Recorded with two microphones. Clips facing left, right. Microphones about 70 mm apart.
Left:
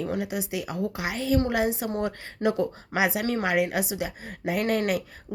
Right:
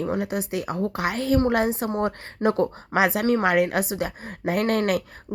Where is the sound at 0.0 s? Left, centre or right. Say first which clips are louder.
Right 3 dB; right.